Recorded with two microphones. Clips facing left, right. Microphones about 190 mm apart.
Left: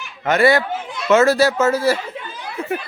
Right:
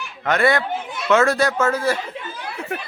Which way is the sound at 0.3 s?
5° left (ahead or behind).